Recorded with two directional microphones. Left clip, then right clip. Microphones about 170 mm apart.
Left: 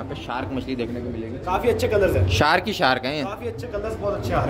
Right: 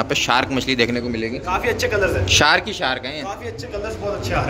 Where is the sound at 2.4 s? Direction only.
15° left (ahead or behind).